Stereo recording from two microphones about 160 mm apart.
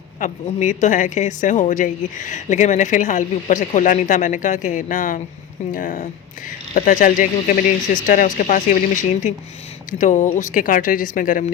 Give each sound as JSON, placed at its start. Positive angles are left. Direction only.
{"t": 0.2, "sound": "speech", "side_deg": 50}